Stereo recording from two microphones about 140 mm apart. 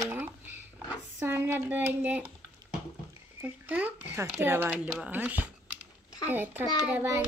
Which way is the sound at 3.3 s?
10° right (ahead or behind).